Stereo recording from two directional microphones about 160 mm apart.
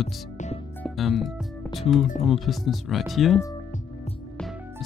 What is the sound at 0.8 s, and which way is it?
Music, centre (ahead or behind).